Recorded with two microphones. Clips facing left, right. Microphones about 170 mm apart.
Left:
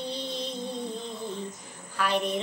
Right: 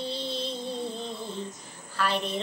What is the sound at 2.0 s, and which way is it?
Speech, 15° left (ahead or behind).